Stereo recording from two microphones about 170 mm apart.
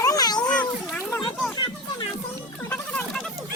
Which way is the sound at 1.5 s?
25° left (ahead or behind).